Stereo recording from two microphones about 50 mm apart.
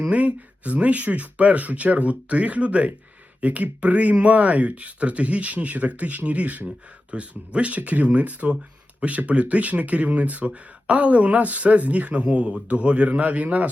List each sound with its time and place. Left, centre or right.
0.1 s speech: right